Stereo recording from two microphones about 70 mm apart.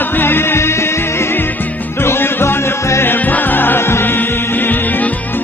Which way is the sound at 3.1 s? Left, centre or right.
Left.